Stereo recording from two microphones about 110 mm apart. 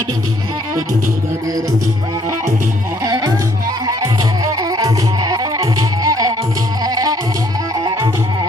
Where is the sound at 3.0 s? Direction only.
35° right (ahead or behind).